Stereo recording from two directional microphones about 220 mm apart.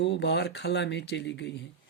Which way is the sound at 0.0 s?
50° left (ahead or behind).